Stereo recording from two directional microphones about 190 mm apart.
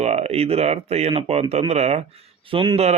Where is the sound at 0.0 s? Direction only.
35° right (ahead or behind).